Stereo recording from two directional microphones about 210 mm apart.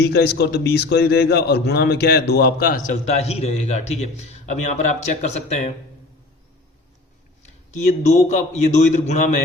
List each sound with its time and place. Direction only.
0.1 s a man's voice: 50° left (ahead or behind); by 5.7 s 30° left (ahead or behind)
7.7 s a man's voice: 35° left (ahead or behind)